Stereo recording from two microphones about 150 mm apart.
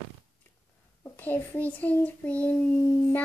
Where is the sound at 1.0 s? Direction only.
10° left (ahead or behind).